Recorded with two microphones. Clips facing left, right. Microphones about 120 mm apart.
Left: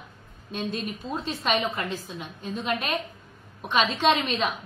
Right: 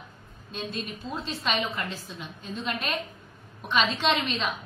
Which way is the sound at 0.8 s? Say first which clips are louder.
Left 3 dB; 45° left (ahead or behind).